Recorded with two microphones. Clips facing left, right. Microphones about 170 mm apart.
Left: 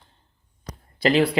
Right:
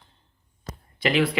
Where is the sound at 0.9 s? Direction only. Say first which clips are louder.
Left 3 dB; 35° left (ahead or behind).